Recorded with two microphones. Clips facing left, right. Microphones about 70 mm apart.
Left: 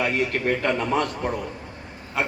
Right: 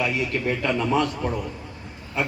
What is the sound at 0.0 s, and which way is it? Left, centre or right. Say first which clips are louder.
A man's voice: left 1 dB; left.